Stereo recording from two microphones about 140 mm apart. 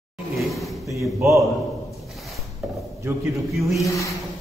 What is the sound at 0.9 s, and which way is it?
Speech, 20° right (ahead or behind).